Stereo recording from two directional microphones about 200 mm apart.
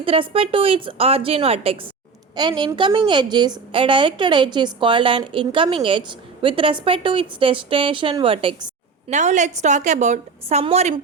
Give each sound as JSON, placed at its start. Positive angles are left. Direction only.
{"t": 0.0, "sound": "a woman's voice", "side_deg": -25}
{"t": 9.0, "sound": "a woman's voice", "side_deg": -35}